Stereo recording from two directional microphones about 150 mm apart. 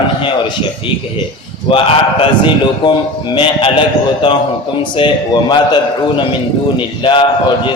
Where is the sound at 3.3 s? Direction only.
35° left (ahead or behind).